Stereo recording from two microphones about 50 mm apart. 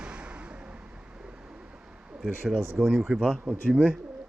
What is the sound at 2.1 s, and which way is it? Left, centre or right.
Speech, centre.